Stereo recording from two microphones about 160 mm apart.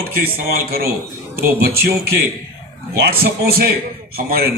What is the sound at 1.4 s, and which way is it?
A man's voice, 70° right (ahead or behind).